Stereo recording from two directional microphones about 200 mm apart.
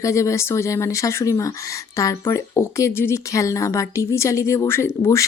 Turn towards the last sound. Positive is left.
turn(degrees=15)  # may be behind; listen again after turning